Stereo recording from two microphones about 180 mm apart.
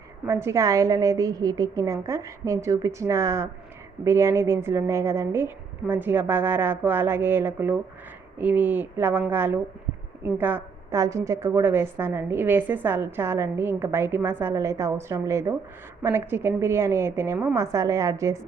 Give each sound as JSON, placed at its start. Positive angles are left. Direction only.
{"t": 0.3, "sound": "a woman's voice", "side_deg": -15}